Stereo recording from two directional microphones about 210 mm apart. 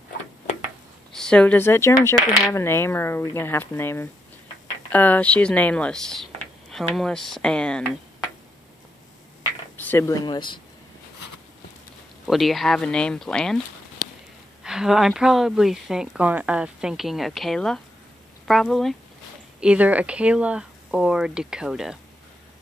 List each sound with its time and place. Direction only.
1.1 s speech: 5° left (ahead or behind)
9.8 s speech: 10° left (ahead or behind)
12.3 s speech: centre (ahead or behind)
14.6 s speech: 5° right (ahead or behind)